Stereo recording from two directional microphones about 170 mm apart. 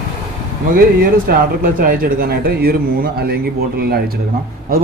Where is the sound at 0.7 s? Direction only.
55° right (ahead or behind).